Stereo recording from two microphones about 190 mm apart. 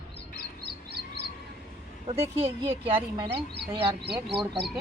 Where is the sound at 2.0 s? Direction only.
30° right (ahead or behind).